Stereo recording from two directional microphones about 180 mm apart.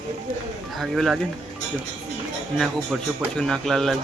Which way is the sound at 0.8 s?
Centre (ahead or behind).